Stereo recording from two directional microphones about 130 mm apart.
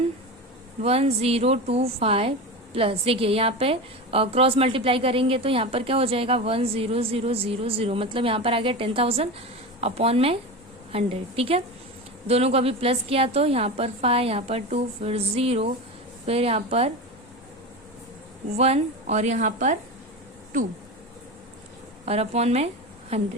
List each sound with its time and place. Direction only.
0.8 s a woman's voice: 50° right (ahead or behind)
18.5 s a woman's voice: 55° right (ahead or behind); by 19.7 s 70° right (ahead or behind)
22.0 s a woman's voice: 55° right (ahead or behind)